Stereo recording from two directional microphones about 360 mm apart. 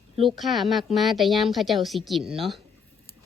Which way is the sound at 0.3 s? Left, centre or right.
Centre.